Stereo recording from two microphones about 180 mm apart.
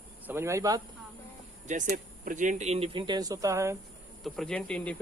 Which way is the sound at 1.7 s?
45° right (ahead or behind).